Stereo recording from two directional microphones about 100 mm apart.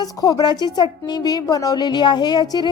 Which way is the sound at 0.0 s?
40° left (ahead or behind).